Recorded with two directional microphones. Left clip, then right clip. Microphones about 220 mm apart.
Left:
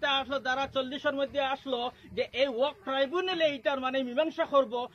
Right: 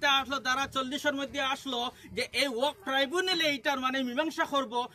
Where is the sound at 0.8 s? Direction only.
25° right (ahead or behind).